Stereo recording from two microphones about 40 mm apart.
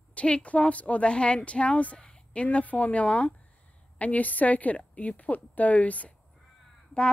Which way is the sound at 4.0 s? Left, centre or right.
Left.